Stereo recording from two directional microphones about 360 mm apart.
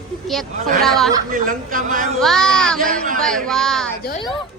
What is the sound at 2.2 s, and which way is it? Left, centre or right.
A woman's voice, centre.